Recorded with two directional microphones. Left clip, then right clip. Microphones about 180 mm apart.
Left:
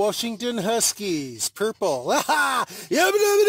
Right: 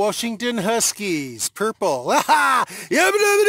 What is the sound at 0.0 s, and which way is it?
Speech, 20° right (ahead or behind).